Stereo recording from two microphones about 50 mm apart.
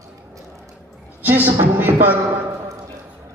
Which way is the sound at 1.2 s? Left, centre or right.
Right.